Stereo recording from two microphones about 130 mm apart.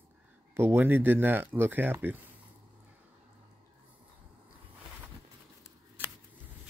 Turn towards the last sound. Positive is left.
turn(degrees=-15)  # may be behind; listen again after turning